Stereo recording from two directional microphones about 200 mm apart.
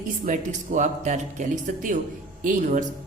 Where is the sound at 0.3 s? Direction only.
40° right (ahead or behind).